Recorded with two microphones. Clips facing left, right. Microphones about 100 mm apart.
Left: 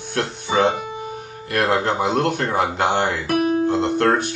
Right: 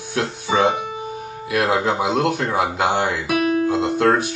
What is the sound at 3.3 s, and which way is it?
Music, 80° right.